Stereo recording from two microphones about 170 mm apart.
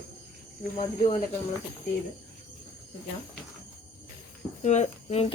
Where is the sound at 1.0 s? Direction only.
50° left (ahead or behind).